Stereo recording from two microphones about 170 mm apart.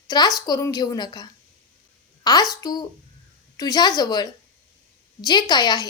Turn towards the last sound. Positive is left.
turn(degrees=25)  # may be behind; listen again after turning